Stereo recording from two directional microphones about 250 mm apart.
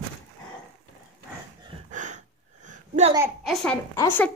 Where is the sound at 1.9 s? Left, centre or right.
Right.